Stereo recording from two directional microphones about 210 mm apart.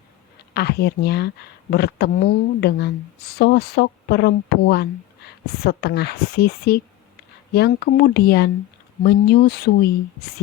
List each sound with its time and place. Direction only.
0.5 s speech: 50° left (ahead or behind)